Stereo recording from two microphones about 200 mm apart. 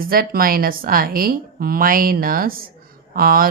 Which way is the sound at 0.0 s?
45° right (ahead or behind).